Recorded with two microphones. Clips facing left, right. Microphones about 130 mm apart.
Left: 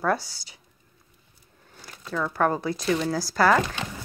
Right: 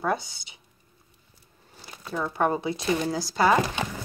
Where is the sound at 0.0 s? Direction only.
20° right (ahead or behind).